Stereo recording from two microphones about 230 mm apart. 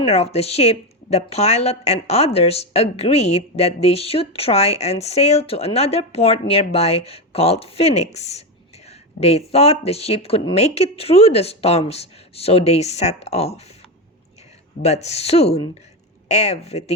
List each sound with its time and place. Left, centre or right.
0.0 s a woman's voice: left
14.8 s a woman's voice: left